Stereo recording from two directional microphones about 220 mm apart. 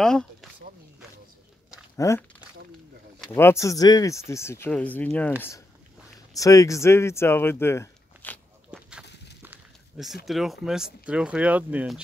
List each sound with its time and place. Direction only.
0.0 s speech: centre (ahead or behind)
2.0 s speech: 15° left (ahead or behind)
3.3 s speech: 10° left (ahead or behind)
6.3 s speech: 15° left (ahead or behind)
9.0 s a sound: 50° left (ahead or behind)
9.4 s speech: 5° right (ahead or behind)